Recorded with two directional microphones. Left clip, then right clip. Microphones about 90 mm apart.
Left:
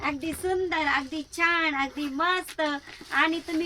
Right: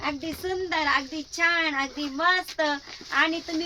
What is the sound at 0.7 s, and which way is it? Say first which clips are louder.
Speech: right 1 dB; 10° right (ahead or behind).